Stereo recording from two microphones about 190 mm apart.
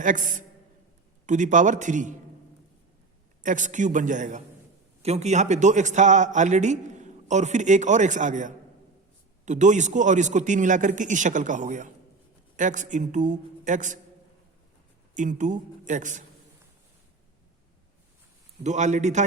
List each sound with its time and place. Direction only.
0.0 s a man's voice: 45° right (ahead or behind)
3.4 s a man's voice: 40° right (ahead or behind)
15.1 s a man's voice: 40° right (ahead or behind)
18.6 s a man's voice: 40° right (ahead or behind)